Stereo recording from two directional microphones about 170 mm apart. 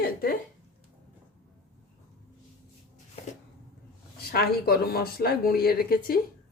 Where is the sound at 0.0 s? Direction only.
60° left (ahead or behind).